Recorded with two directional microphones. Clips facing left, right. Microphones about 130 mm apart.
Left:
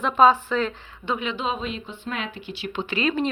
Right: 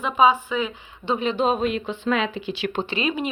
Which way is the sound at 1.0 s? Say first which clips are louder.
Right 5 dB; 30° right (ahead or behind).